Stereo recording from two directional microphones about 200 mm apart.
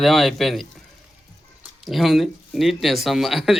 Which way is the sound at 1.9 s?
Centre (ahead or behind).